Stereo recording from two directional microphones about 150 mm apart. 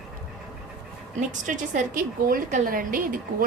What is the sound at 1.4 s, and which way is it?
A woman's voice, 60° right (ahead or behind).